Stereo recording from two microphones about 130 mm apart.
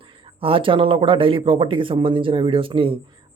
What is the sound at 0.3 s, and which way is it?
Speech, 45° right (ahead or behind).